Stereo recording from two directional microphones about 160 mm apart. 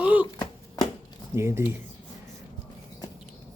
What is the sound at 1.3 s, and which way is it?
Speech, 15° right (ahead or behind).